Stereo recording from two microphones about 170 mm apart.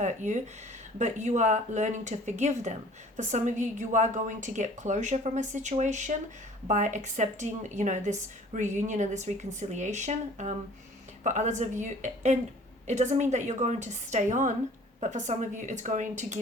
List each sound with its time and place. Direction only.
0.0 s a woman's voice: 45° right (ahead or behind)